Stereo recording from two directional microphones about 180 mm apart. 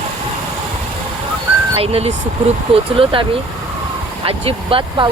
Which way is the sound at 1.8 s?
35° right (ahead or behind).